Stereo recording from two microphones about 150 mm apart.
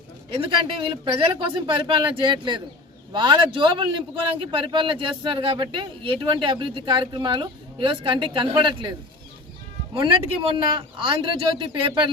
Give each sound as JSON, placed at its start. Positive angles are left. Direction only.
{"t": 0.8, "sound": "a man's voice", "side_deg": -35}
{"t": 9.9, "sound": "a man's voice", "side_deg": -35}